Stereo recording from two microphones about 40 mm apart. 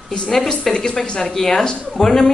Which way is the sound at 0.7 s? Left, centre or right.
Centre.